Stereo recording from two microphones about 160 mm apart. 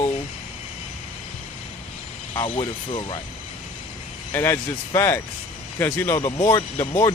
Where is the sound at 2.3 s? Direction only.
35° left (ahead or behind).